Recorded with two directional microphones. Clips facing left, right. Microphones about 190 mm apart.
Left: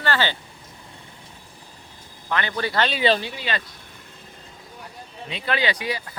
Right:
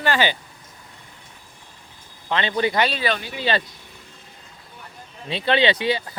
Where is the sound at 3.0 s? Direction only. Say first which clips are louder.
Left 4 dB; 25° left (ahead or behind).